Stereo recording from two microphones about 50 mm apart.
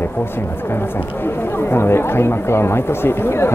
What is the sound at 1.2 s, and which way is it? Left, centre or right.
Speech, left.